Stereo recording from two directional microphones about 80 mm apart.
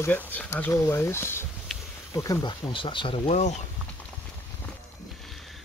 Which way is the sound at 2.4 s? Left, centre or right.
Left.